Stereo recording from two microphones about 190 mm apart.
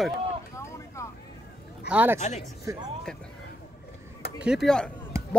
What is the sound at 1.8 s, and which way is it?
Speech, 10° right (ahead or behind).